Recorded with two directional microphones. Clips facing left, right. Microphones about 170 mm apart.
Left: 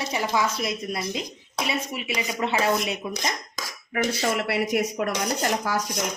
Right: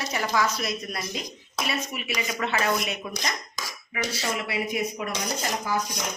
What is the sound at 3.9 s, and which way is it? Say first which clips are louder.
Speech: left 5 dB; 55° left (ahead or behind).